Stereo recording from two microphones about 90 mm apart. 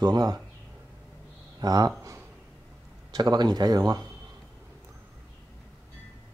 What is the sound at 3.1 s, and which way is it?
Speech, 50° right (ahead or behind).